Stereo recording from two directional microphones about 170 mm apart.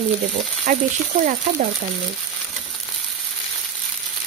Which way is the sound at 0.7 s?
50° right (ahead or behind).